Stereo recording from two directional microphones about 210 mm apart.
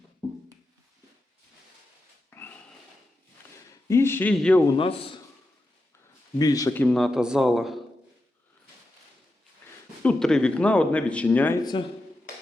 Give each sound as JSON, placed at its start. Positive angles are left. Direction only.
{"t": 2.3, "sound": "pig", "side_deg": 10}
{"t": 3.8, "sound": "speech", "side_deg": 10}
{"t": 4.8, "sound": "a man's voice", "side_deg": 25}
{"t": 6.4, "sound": "speech", "side_deg": 15}
{"t": 10.0, "sound": "speech", "side_deg": 5}